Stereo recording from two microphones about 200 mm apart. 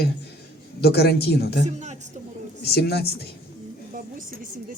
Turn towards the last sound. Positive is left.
turn(degrees=55)  # may be behind; listen again after turning